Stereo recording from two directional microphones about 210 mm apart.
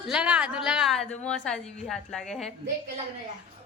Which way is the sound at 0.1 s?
5° right (ahead or behind).